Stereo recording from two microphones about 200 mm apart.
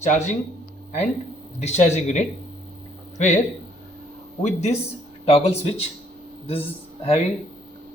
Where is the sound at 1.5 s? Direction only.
35° left (ahead or behind).